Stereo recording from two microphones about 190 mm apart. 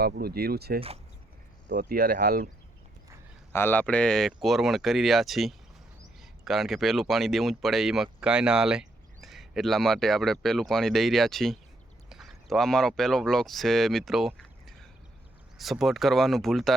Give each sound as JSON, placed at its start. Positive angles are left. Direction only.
{"t": 0.0, "sound": "speech", "side_deg": -55}
{"t": 3.5, "sound": "speech", "side_deg": 10}